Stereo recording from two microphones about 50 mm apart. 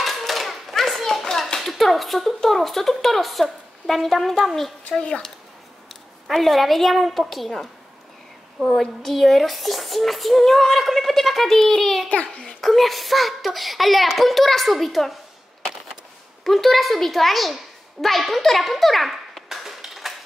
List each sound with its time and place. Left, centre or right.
0.0 s hands: centre
3.8 s a child's voice: centre
4.9 s speech: centre
6.2 s a child's voice: centre
8.6 s a child's voice: centre
12.1 s a child's voice: left
12.5 s a child's voice: centre
16.4 s a child's voice: centre
18.0 s a sound: centre